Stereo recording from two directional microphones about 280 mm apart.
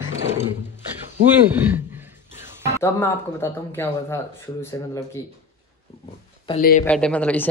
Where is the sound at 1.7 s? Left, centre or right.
Centre.